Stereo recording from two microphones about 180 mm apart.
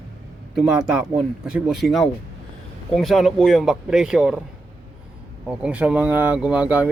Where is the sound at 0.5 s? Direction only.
5° right (ahead or behind).